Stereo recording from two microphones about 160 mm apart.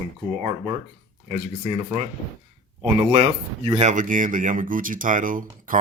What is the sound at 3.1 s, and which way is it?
Speech, 40° right (ahead or behind).